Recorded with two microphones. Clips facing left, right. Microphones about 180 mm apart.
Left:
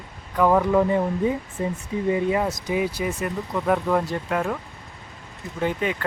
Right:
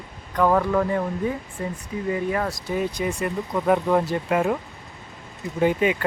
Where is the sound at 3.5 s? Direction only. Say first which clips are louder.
Right 2 dB; 10° right (ahead or behind).